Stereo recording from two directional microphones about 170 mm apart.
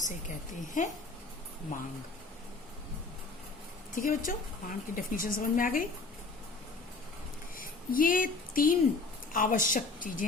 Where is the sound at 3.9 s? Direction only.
55° left (ahead or behind).